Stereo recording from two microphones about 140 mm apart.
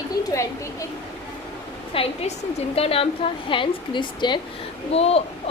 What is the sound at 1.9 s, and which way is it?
A woman's voice, 40° left (ahead or behind).